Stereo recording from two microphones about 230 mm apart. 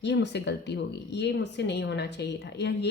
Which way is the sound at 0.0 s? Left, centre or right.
Left.